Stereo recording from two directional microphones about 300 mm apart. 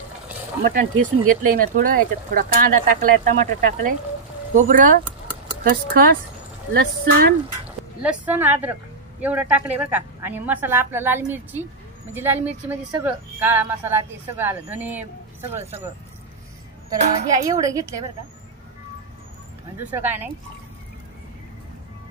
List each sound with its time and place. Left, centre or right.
0.6 s speech: right
8.0 s a woman's voice: centre
16.9 s speech: right
17.3 s a woman's voice: centre
19.8 s a woman's voice: centre